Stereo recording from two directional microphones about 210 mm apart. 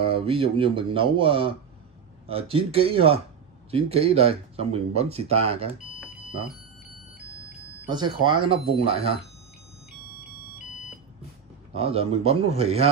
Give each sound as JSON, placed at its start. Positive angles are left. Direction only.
{"t": 0.0, "sound": "speech", "side_deg": -25}
{"t": 7.9, "sound": "speech", "side_deg": -20}
{"t": 11.7, "sound": "speech", "side_deg": -30}